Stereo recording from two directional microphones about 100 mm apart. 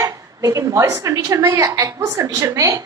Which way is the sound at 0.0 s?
35° right (ahead or behind).